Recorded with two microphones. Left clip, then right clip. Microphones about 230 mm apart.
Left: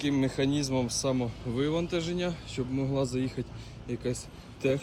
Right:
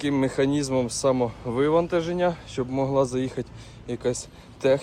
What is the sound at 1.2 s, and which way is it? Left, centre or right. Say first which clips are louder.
Speech: right 8 dB; right.